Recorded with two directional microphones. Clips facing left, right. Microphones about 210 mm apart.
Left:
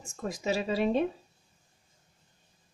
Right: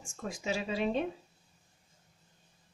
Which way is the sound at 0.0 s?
40° left (ahead or behind).